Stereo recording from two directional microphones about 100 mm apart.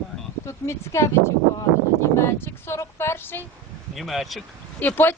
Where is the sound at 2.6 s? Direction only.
25° left (ahead or behind).